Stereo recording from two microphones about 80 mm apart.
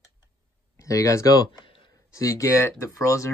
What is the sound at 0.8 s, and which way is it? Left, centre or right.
Speech, left.